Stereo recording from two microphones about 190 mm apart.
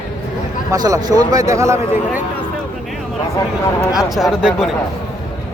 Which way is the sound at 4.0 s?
Centre (ahead or behind).